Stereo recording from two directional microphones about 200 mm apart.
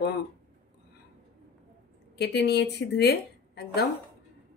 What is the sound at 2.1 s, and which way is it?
A woman's voice, 55° left (ahead or behind).